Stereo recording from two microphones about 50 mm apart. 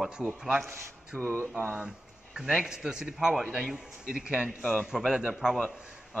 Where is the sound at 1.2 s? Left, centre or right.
Right.